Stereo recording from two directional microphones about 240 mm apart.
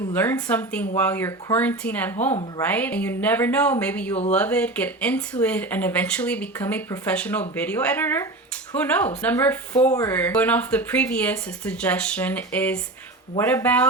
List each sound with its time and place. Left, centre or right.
0.1 s speech: centre
4.1 s speech: left
4.4 s speech: centre